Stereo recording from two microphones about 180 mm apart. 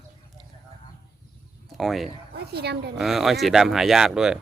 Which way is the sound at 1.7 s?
Centre (ahead or behind).